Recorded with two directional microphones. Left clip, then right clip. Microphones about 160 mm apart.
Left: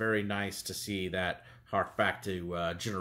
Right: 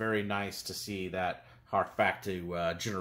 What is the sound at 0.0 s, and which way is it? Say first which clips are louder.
Speech: left 1 dB; 10° left (ahead or behind).